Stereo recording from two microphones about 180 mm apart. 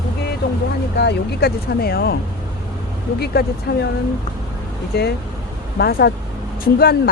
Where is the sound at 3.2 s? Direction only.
60° left (ahead or behind).